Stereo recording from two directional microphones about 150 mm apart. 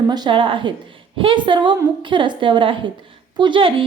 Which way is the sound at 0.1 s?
30° right (ahead or behind).